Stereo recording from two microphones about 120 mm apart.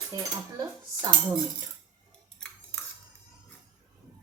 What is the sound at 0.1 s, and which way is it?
Speech, 30° right (ahead or behind).